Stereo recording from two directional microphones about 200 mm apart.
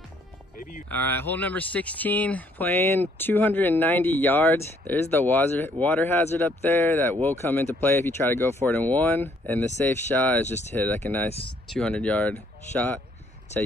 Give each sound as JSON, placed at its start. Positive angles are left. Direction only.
{"t": 0.6, "sound": "music", "side_deg": 40}
{"t": 0.8, "sound": "speech", "side_deg": 10}